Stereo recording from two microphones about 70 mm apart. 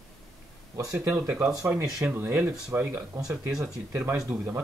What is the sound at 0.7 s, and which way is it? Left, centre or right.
Speech, right.